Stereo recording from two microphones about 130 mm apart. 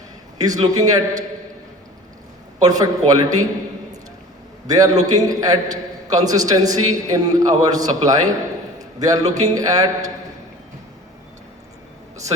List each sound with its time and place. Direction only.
0.3 s a man's voice: 30° right (ahead or behind)
2.6 s a man's voice: 30° right (ahead or behind)
4.6 s a man's voice: 30° right (ahead or behind)